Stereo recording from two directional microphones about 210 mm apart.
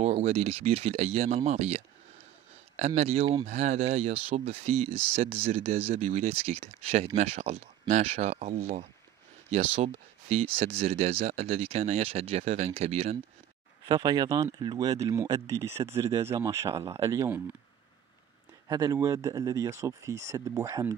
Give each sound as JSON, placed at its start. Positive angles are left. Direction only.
{"t": 0.0, "sound": "speech", "side_deg": -30}
{"t": 13.8, "sound": "speech", "side_deg": -20}
{"t": 18.7, "sound": "speech", "side_deg": -15}